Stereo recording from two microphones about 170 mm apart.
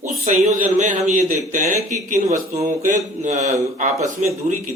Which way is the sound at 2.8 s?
45° right (ahead or behind).